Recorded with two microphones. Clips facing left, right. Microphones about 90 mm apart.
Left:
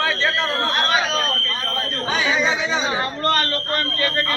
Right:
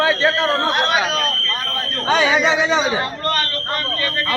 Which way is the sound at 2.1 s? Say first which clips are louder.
Right 5 dB; 75° right (ahead or behind).